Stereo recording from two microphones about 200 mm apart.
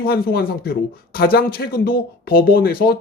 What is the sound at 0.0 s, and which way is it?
Speech, 50° left (ahead or behind).